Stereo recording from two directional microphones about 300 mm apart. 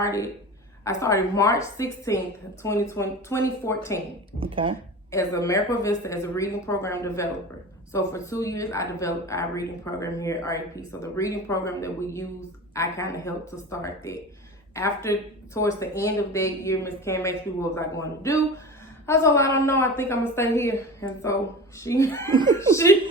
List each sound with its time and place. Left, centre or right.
0.0 s speech: centre
4.4 s speech: centre
5.1 s speech: centre
22.3 s speech: centre
22.5 s speech: centre